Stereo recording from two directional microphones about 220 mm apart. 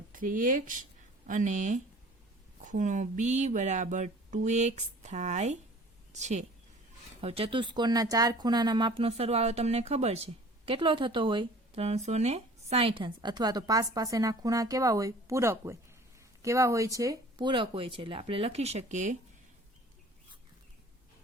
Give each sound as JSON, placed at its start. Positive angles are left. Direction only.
{"t": 0.1, "sound": "speech", "side_deg": -40}